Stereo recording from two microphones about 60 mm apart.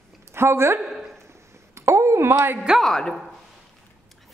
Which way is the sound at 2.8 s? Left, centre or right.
Centre.